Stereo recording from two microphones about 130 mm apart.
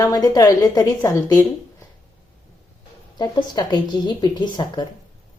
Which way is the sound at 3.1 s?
30° left (ahead or behind).